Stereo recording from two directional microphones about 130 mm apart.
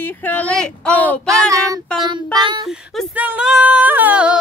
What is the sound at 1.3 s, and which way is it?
Child singing, 25° right (ahead or behind).